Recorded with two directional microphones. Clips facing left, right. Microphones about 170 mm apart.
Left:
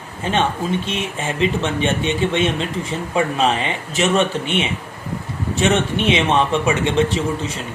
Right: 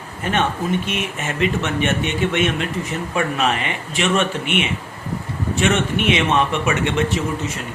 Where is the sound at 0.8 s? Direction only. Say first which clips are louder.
Left 1 dB; 30° left (ahead or behind).